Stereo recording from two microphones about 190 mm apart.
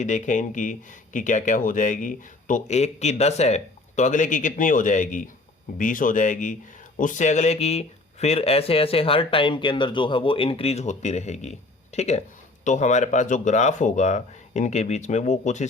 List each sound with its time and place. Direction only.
0.0 s speech: 40° left (ahead or behind)